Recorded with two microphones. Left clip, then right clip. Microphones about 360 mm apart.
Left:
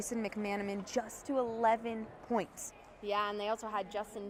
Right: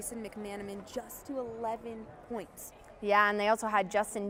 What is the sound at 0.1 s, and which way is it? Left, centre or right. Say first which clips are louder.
A woman's voice: left 5 dB; left.